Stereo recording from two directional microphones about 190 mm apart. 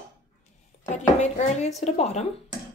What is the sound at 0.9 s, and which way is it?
Speech, 35° left (ahead or behind).